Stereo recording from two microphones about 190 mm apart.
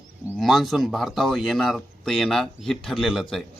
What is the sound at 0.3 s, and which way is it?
Speech, centre (ahead or behind).